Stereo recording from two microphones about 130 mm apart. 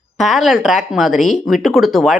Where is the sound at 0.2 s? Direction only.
Centre (ahead or behind).